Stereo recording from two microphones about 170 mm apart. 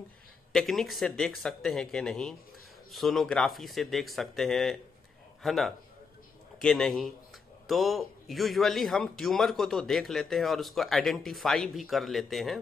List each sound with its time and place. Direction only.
0.5 s a man's voice: centre (ahead or behind)